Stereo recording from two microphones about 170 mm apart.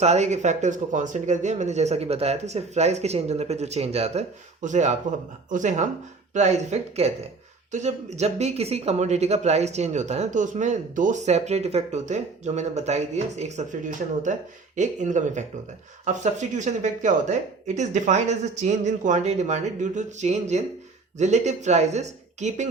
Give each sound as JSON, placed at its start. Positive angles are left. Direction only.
{"t": 0.0, "sound": "speech", "side_deg": -40}